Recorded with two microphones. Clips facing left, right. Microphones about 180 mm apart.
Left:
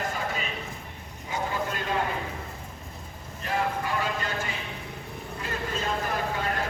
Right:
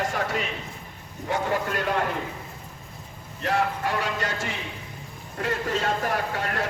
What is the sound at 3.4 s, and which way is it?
Speech, 80° right.